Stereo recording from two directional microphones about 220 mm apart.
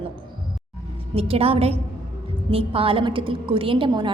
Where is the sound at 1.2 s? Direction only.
25° right (ahead or behind).